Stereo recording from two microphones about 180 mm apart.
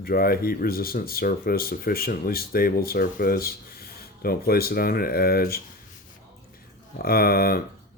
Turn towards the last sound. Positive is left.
turn(degrees=55)  # may be behind; listen again after turning